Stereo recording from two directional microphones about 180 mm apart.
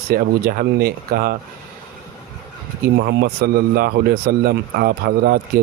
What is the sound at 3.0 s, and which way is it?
Speech, 70° right (ahead or behind).